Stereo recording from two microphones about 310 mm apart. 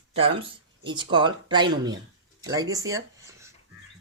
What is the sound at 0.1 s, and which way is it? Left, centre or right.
Speech, centre.